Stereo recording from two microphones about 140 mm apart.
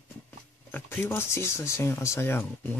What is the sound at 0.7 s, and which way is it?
Speech, 15° left (ahead or behind).